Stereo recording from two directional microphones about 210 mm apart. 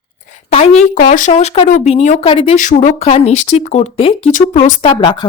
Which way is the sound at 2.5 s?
35° left (ahead or behind).